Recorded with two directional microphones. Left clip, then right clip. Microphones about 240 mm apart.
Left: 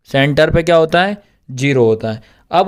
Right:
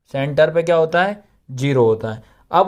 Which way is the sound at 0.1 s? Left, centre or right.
Left.